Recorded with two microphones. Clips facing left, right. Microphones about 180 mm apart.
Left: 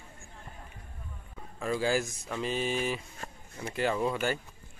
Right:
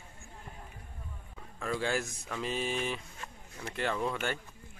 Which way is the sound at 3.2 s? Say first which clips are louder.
Left 3 dB; 40° left (ahead or behind).